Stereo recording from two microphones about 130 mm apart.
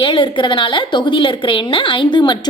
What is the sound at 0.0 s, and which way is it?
A woman's voice, 40° left (ahead or behind).